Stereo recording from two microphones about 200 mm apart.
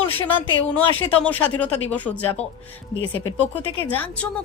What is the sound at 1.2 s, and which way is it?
A woman's voice, 10° left (ahead or behind).